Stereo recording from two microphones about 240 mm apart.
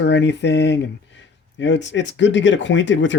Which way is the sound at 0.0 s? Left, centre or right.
Left.